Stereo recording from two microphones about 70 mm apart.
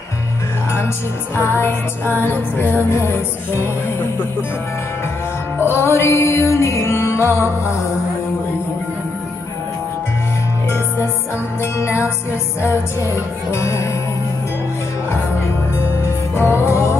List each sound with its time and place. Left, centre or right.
1.3 s music: left
5.7 s music: left
11.8 s music: left
16.0 s music: left